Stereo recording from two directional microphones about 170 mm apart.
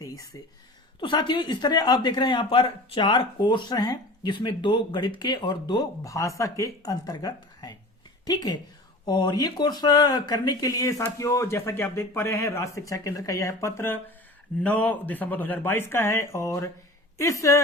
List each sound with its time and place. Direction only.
0.3 s a woman's voice: 20° left (ahead or behind)